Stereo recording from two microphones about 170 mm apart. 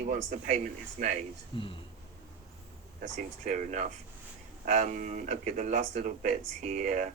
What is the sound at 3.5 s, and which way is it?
Speech, 45° right (ahead or behind).